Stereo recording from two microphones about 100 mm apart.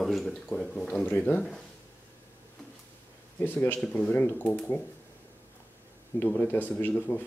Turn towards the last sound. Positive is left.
turn(degrees=15)  # may be behind; listen again after turning